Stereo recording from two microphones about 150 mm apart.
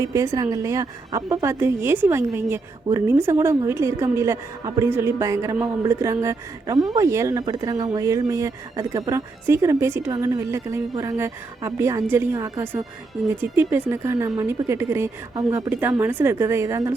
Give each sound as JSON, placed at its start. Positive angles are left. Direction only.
{"t": 0.0, "sound": "speech", "side_deg": -20}